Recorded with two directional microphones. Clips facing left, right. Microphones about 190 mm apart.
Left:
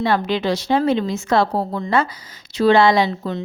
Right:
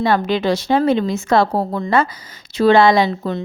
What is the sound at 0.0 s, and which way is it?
Speech, 45° right (ahead or behind).